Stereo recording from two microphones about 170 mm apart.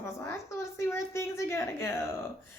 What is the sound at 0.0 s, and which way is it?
A woman's voice, 15° left (ahead or behind).